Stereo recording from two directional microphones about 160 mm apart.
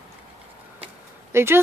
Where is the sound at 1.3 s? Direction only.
15° right (ahead or behind).